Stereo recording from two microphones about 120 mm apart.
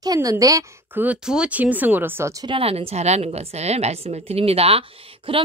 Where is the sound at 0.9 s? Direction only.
10° right (ahead or behind).